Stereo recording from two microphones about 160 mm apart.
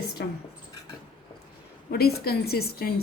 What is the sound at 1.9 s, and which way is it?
A woman's voice, 75° left (ahead or behind).